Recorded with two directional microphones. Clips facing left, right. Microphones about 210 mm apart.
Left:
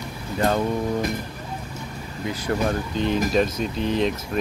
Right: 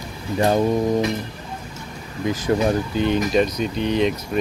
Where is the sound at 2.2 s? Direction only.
20° right (ahead or behind).